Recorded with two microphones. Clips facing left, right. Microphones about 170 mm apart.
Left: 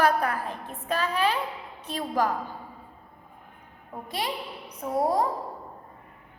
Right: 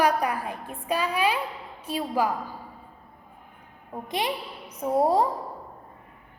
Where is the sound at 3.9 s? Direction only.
20° right (ahead or behind).